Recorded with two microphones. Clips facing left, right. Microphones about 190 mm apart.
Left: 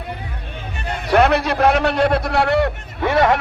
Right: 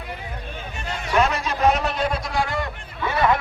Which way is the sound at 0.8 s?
60° left (ahead or behind).